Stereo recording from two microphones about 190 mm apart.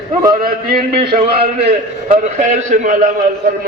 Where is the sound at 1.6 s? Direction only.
45° right (ahead or behind).